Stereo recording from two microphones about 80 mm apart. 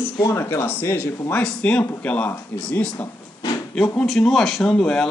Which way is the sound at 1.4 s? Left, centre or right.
Centre.